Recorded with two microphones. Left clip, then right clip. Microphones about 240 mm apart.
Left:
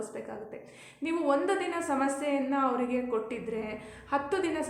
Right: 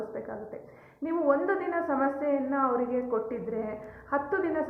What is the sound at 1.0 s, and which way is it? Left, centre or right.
A woman's voice, left.